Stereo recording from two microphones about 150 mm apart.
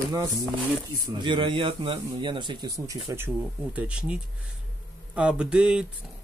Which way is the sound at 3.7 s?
10° right (ahead or behind).